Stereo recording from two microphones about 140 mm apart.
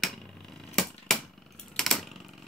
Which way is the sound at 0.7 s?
5° left (ahead or behind).